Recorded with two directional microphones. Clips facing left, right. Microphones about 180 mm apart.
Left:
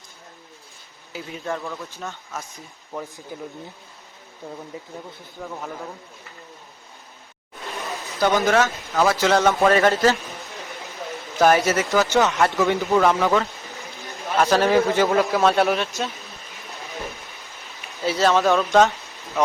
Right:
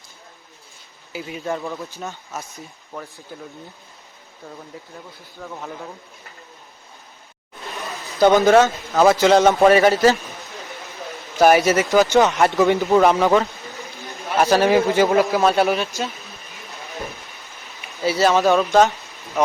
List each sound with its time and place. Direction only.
1.5 s a man's voice: 15° right (ahead or behind)
4.4 s speech: 15° left (ahead or behind)
5.4 s speech: 5° left (ahead or behind)
8.2 s a man's voice: 25° right (ahead or behind)
11.3 s a man's voice: 10° right (ahead or behind)
18.0 s speech: 5° right (ahead or behind)